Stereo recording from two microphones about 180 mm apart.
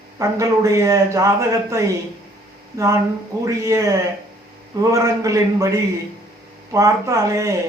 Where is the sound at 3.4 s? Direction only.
15° right (ahead or behind).